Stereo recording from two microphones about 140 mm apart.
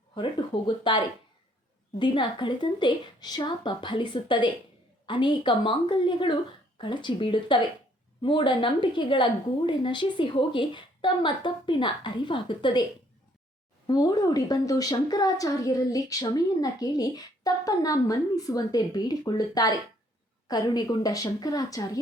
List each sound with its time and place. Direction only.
0.9 s a woman's voice: 35° left (ahead or behind)
13.8 s a woman's voice: 30° left (ahead or behind)